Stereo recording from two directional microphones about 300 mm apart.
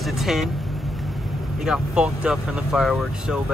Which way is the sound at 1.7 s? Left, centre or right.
Centre.